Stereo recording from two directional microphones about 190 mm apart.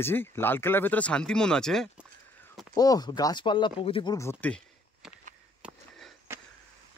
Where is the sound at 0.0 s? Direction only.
10° left (ahead or behind).